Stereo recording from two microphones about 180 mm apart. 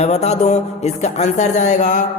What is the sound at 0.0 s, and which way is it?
Speech, 40° left (ahead or behind).